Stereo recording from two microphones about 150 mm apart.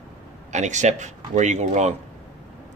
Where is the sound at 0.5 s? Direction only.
50° right (ahead or behind).